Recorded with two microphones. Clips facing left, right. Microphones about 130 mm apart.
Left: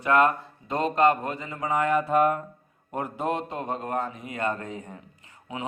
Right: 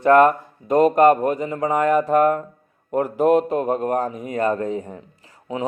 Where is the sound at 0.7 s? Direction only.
45° right (ahead or behind).